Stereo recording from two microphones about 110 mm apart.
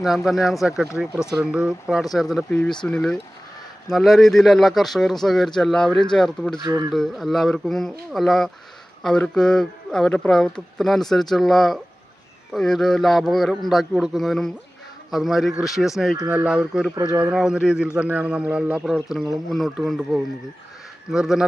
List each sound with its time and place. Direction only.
0.0 s a man's voice: centre (ahead or behind)
2.8 s speech: 10° left (ahead or behind)
6.7 s speech: 40° right (ahead or behind)
6.9 s a man's voice: centre (ahead or behind)
21.1 s speech: 5° right (ahead or behind)